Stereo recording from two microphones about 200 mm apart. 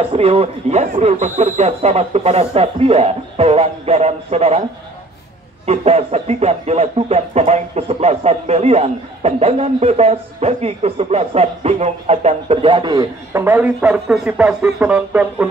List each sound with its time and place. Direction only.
0.1 s speech: 30° right (ahead or behind)
5.7 s speech: 30° right (ahead or behind)
13.4 s a man's voice: 10° right (ahead or behind)